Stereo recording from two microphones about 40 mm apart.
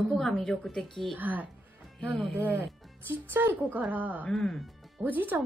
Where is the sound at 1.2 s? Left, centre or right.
Right.